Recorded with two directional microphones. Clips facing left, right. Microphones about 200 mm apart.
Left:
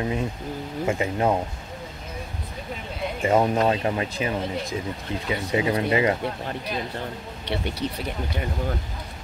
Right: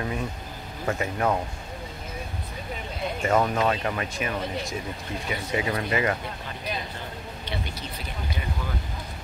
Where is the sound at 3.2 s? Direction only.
20° left (ahead or behind).